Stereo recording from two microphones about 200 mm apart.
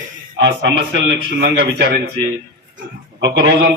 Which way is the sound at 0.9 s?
50° right (ahead or behind).